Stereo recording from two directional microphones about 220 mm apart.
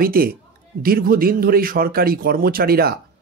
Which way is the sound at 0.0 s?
40° right (ahead or behind).